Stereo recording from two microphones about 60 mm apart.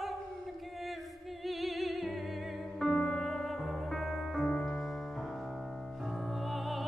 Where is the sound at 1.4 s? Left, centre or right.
Centre.